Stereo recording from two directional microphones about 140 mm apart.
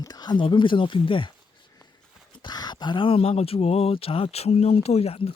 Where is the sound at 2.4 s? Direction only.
30° left (ahead or behind).